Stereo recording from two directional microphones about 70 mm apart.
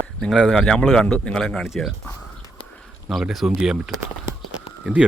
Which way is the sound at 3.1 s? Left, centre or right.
Centre.